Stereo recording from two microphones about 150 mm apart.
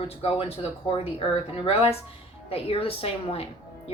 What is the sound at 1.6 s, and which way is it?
A woman's voice, 40° left (ahead or behind).